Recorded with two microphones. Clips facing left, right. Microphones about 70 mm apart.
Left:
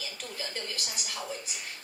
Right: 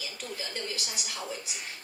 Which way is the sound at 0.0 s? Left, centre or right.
Left.